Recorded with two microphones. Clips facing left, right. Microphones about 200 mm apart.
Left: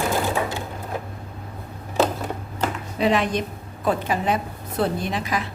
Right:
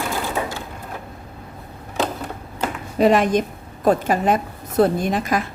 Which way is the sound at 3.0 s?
45° right (ahead or behind).